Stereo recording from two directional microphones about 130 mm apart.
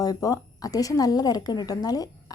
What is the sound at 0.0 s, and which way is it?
A woman's voice, 25° left (ahead or behind).